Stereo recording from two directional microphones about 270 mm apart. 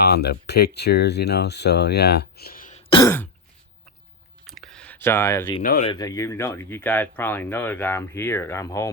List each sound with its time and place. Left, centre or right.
0.0 s speech: left
3.0 s speech: centre
4.4 s clicking: centre
5.8 s speech: centre